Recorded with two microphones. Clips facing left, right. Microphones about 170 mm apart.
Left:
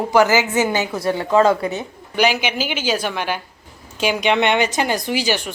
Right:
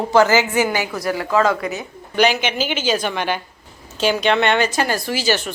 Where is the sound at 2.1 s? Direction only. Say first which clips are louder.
Right 1 dB; 10° left (ahead or behind).